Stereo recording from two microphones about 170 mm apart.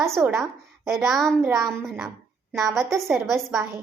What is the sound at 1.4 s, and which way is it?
Speech, 15° right (ahead or behind).